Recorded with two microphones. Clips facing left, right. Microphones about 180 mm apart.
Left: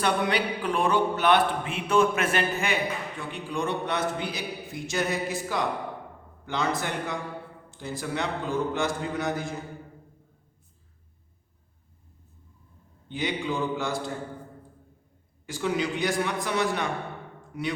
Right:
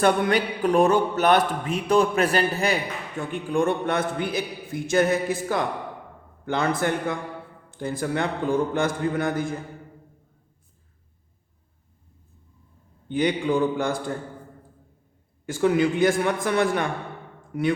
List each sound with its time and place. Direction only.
0.0 s a man's voice: 45° right (ahead or behind)
3.2 s a man's voice: 50° right (ahead or behind)
13.1 s a man's voice: 55° right (ahead or behind)
15.4 s a man's voice: 50° right (ahead or behind)